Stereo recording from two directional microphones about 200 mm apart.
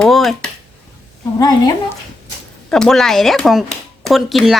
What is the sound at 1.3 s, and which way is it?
Speech, 20° left (ahead or behind).